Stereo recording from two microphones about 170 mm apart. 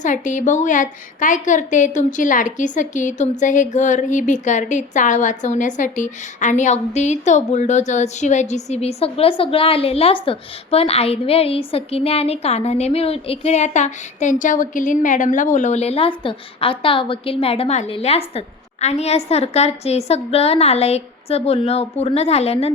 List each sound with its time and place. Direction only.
0.0 s a woman's voice: 45° left (ahead or behind)